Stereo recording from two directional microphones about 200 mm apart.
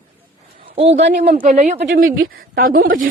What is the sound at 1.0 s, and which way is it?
Speech, 55° right (ahead or behind).